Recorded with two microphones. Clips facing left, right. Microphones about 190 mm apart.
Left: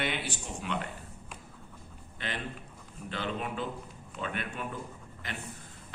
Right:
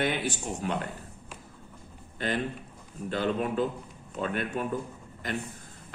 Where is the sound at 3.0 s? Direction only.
40° right (ahead or behind).